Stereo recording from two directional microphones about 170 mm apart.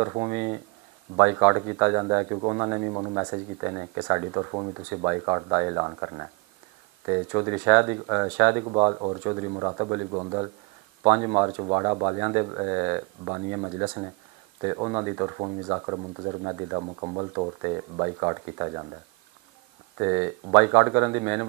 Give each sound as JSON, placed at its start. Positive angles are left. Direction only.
{"t": 0.0, "sound": "speech", "side_deg": -25}
{"t": 20.0, "sound": "speech", "side_deg": -20}